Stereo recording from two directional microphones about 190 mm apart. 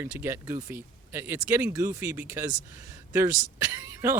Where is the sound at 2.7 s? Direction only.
15° right (ahead or behind).